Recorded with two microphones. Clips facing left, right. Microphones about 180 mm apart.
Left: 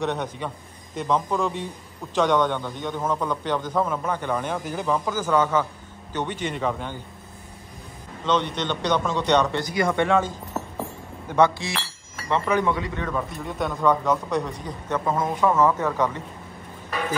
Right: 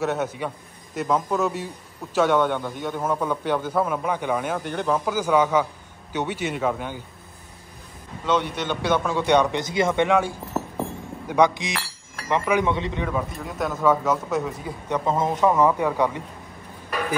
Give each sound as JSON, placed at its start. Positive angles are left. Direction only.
{"t": 0.0, "sound": "a man's voice", "side_deg": -5}
{"t": 8.3, "sound": "a man's voice", "side_deg": -10}
{"t": 12.7, "sound": "speech", "side_deg": -25}
{"t": 13.0, "sound": "a man's voice", "side_deg": -5}
{"t": 14.9, "sound": "a man's voice", "side_deg": -25}